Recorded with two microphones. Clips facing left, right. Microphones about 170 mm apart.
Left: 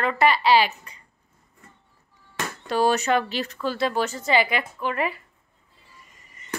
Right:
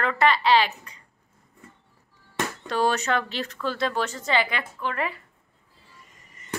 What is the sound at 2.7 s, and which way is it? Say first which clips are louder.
A woman's voice: left 4 dB; 10° left (ahead or behind).